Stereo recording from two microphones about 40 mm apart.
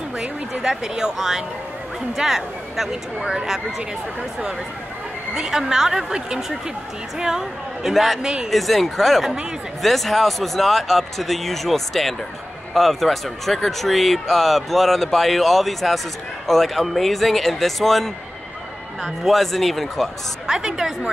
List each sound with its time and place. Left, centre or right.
0.2 s speech: centre
7.2 s speech: centre
7.9 s speech: centre
8.2 s speech: centre
8.5 s speech: centre
19.2 s speech: centre
20.4 s speech: centre